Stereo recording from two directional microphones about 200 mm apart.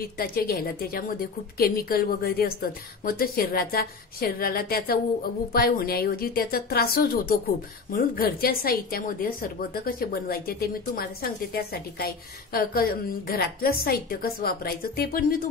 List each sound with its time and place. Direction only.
0.2 s a woman's voice: 50° left (ahead or behind)